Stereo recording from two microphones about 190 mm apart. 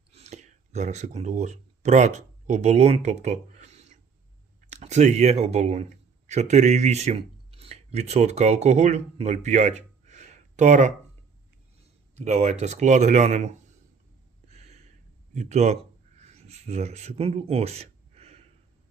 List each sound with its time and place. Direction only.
0.1 s speech: 35° right (ahead or behind)
12.1 s speech: 35° right (ahead or behind)
14.4 s a sound: 35° right (ahead or behind)
15.4 s speech: 35° right (ahead or behind)